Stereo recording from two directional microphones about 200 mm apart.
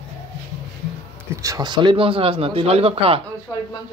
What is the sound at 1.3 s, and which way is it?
Speech, 15° right (ahead or behind).